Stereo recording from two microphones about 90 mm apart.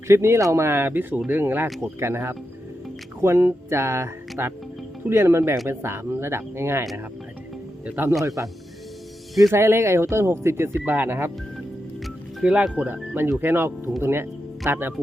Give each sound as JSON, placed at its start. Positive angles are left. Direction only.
{"t": 0.1, "sound": "speech", "side_deg": -30}
{"t": 7.9, "sound": "speech", "side_deg": -25}
{"t": 12.0, "sound": "speech", "side_deg": -10}